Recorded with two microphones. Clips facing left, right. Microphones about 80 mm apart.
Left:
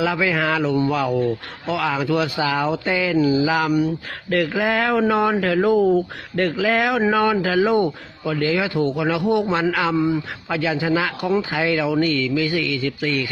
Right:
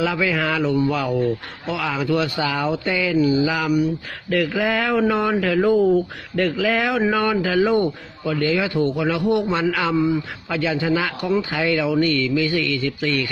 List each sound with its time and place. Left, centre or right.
0.0 s speech: left